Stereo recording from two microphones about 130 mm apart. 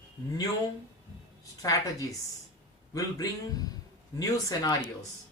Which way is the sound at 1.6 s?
25° left (ahead or behind).